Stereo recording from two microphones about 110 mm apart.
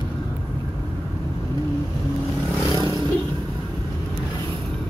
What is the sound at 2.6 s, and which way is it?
Vehicle, 30° left (ahead or behind).